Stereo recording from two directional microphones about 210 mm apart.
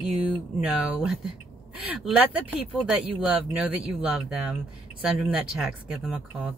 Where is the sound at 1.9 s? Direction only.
5° right (ahead or behind).